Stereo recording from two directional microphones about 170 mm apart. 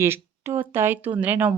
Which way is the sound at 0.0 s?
15° right (ahead or behind).